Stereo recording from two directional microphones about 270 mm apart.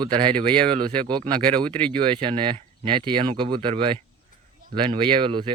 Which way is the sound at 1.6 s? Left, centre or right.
Centre.